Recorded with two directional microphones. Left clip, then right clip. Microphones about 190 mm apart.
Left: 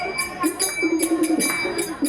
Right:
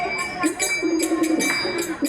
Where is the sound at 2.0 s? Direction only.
60° left (ahead or behind).